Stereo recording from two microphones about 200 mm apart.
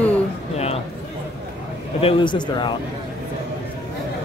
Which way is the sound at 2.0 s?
25° left (ahead or behind).